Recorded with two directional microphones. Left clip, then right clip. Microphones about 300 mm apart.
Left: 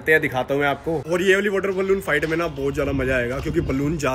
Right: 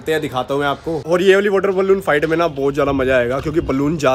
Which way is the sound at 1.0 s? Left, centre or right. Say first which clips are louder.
Right 6 dB; centre.